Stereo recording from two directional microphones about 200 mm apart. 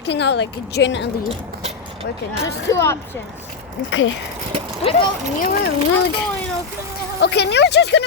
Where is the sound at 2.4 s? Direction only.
15° left (ahead or behind).